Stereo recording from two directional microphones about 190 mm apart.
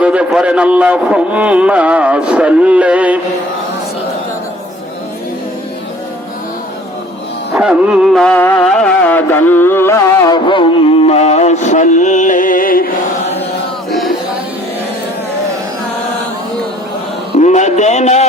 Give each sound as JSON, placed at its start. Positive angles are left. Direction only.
{"t": 0.0, "sound": "a man's voice", "side_deg": -5}
{"t": 7.5, "sound": "music", "side_deg": -5}
{"t": 17.4, "sound": "a sound", "side_deg": 40}